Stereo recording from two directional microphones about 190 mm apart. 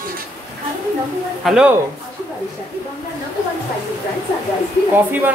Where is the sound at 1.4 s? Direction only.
5° right (ahead or behind).